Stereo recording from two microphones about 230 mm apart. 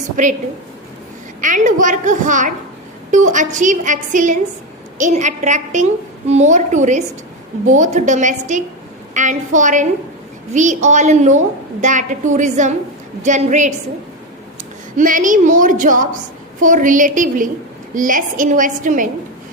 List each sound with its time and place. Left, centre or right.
0.2 s a woman's voice: right
1.4 s a woman's voice: right
14.9 s a woman's voice: right